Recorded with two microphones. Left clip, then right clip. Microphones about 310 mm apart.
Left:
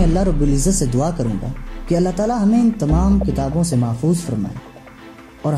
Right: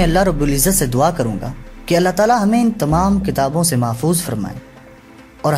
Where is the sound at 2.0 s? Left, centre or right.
Right.